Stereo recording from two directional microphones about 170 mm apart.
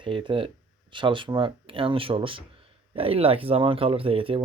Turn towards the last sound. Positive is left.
turn(degrees=-30)  # may be behind; listen again after turning